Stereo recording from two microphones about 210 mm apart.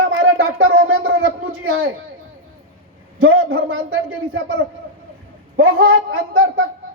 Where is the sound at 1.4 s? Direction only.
75° right (ahead or behind).